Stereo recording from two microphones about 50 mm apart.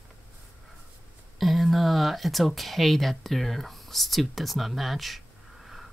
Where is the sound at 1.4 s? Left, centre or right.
Centre.